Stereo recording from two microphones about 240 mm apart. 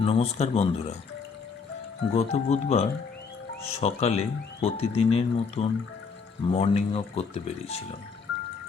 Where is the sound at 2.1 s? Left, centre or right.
Left.